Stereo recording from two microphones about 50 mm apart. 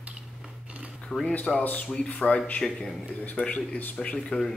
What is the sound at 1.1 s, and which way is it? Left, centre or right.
Speech, centre.